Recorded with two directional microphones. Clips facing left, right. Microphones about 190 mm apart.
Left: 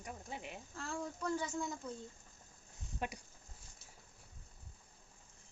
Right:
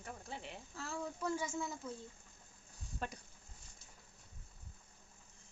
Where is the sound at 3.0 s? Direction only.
15° left (ahead or behind).